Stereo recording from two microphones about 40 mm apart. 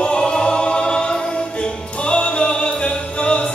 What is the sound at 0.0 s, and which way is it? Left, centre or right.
Music, left.